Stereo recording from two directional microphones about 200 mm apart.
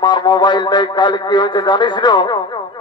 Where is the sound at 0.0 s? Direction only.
20° left (ahead or behind).